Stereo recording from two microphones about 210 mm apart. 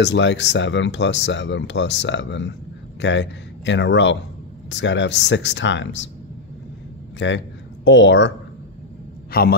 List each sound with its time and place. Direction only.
0.0 s speech: 55° left (ahead or behind)
7.2 s speech: 60° left (ahead or behind)
9.3 s a man's voice: 45° left (ahead or behind)